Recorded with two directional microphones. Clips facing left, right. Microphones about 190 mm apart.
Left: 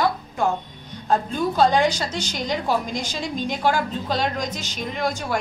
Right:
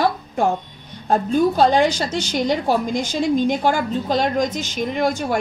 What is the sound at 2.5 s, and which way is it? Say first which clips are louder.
A woman's voice: right 3 dB; 55° right (ahead or behind).